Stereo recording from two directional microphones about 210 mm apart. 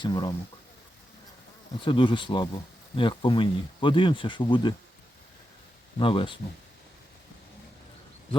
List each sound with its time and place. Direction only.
0.0 s speech: 20° left (ahead or behind)
1.8 s speech: 25° left (ahead or behind)
6.0 s speech: 25° left (ahead or behind)